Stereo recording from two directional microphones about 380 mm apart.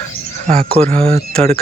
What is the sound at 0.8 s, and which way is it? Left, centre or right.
Speech, centre.